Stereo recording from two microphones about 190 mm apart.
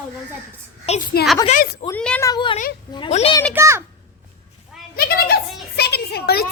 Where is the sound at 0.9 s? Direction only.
35° left (ahead or behind).